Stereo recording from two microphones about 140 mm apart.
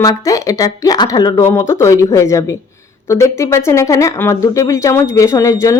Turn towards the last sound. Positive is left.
turn(degrees=20)  # may be behind; listen again after turning